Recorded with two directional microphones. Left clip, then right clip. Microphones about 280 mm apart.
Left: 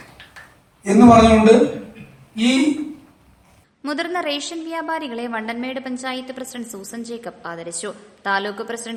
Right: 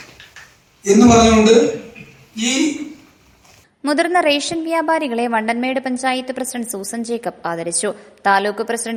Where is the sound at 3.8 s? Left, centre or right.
Centre.